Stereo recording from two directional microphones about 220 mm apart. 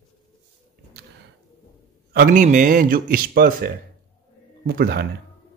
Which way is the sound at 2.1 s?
40° right (ahead or behind).